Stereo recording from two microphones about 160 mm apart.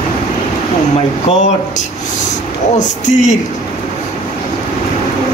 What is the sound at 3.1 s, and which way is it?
Speech, 50° left (ahead or behind).